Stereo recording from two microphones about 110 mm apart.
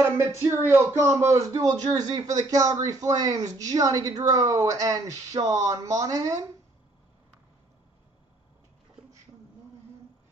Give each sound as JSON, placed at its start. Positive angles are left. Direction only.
{"t": 0.0, "sound": "speech", "side_deg": -25}